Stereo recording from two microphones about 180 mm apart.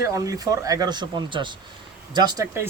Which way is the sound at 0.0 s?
15° right (ahead or behind).